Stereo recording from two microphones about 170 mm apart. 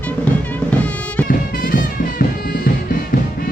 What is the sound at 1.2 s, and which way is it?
Music, 50° left (ahead or behind).